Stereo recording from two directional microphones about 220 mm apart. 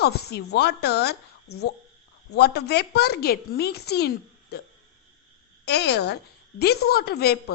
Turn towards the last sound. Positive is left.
turn(degrees=45)  # may be behind; listen again after turning